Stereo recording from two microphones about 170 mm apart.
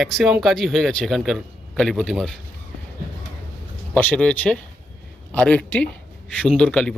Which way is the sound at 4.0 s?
10° left (ahead or behind).